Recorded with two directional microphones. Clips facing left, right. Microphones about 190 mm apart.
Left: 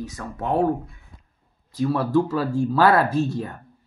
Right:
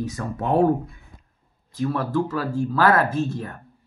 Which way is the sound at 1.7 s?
10° left (ahead or behind).